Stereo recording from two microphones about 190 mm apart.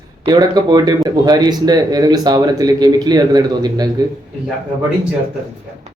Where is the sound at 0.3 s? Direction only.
20° right (ahead or behind).